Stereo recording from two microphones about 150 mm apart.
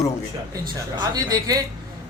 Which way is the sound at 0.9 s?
25° right (ahead or behind).